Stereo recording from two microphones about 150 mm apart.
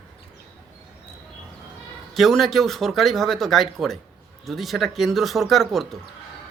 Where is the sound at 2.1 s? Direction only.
Centre (ahead or behind).